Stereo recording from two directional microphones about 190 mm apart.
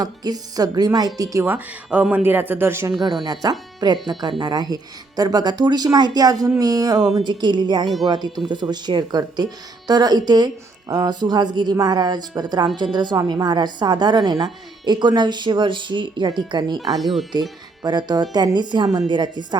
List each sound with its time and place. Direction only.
0.0 s speech: 20° right (ahead or behind)
17.0 s speech: centre (ahead or behind)
17.8 s speech: 20° right (ahead or behind)